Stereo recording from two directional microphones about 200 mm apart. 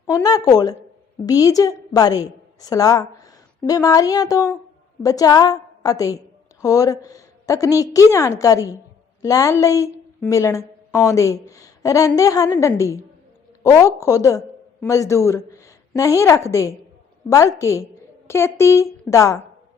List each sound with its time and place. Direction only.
0.1 s a woman's voice: 20° left (ahead or behind)